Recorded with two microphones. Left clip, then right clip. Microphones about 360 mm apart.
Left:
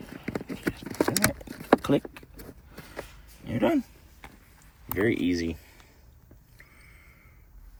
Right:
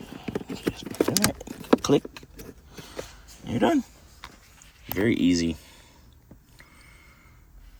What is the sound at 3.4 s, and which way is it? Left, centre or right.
Speech, centre.